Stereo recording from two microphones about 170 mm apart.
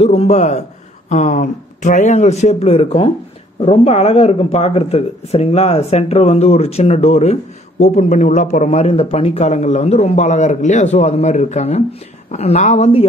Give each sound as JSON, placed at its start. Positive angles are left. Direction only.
{"t": 0.0, "sound": "speech", "side_deg": 35}